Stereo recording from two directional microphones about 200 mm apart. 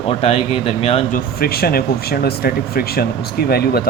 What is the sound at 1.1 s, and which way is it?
Speech, 50° left (ahead or behind).